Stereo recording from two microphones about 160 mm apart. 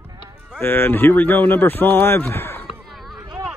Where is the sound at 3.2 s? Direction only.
20° right (ahead or behind).